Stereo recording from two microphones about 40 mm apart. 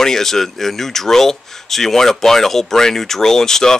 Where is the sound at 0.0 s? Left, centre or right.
Centre.